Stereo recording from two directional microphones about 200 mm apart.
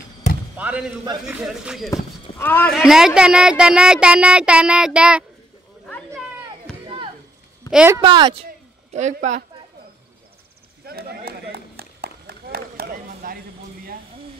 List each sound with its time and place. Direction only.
0.6 s a sound: 5° right (ahead or behind)
1.2 s speech: 5° right (ahead or behind)
1.9 s speech: 10° left (ahead or behind)
2.7 s speech: 5° right (ahead or behind)
6.7 s a sound: 5° left (ahead or behind)
7.7 s speech: 10° right (ahead or behind)
8.0 s speech: 25° right (ahead or behind)
8.5 s a sound: 35° right (ahead or behind)
10.9 s run: 50° right (ahead or behind)